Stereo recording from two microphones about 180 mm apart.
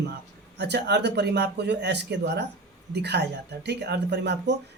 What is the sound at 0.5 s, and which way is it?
Speech, 70° right (ahead or behind).